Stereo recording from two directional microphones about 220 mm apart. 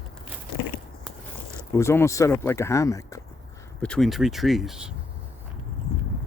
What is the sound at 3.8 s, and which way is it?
Speech, 5° left (ahead or behind).